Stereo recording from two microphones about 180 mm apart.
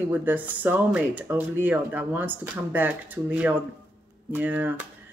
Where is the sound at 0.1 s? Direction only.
10° right (ahead or behind).